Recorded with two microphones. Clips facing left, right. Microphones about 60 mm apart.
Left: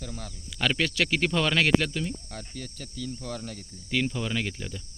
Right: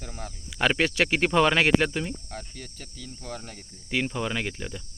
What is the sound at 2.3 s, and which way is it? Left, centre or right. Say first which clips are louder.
Speech: even; centre.